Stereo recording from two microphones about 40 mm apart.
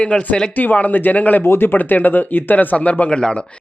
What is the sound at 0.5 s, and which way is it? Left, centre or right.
Speech, left.